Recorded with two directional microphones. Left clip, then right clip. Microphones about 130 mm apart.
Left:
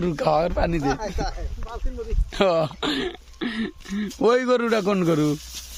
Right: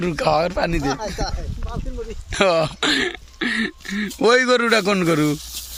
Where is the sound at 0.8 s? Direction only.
20° left (ahead or behind).